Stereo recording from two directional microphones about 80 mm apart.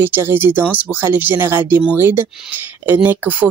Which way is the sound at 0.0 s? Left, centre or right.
Right.